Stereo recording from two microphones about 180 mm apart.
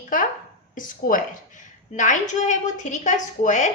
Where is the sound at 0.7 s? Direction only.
50° left (ahead or behind).